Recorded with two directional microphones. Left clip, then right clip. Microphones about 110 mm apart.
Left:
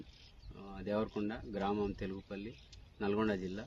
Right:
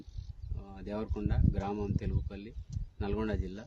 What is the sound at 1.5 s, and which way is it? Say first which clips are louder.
Speech: even; 30° right (ahead or behind).